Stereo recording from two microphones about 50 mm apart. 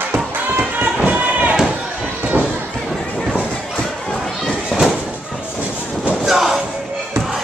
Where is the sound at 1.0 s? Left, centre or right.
Right.